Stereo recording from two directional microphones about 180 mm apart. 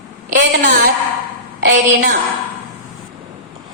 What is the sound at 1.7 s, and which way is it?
Speech, 45° right (ahead or behind).